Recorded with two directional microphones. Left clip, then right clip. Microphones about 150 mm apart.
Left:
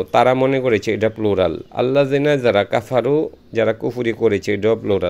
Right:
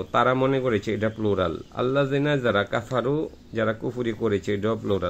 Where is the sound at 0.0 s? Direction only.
20° left (ahead or behind).